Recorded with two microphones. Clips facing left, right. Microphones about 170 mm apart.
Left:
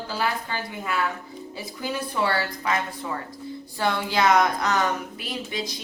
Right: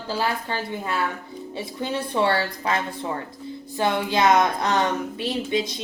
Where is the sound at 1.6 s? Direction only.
25° right (ahead or behind).